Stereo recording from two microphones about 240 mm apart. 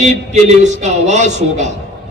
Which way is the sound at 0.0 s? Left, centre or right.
Right.